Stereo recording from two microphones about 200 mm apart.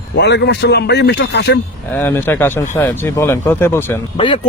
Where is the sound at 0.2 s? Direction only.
60° left (ahead or behind).